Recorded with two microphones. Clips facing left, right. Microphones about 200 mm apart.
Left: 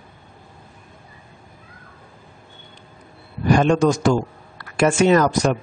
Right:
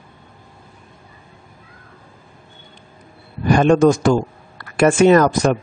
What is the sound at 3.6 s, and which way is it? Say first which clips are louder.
Speech: right 6 dB; 50° right (ahead or behind).